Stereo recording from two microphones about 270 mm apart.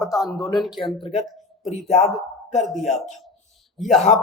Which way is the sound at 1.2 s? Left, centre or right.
Centre.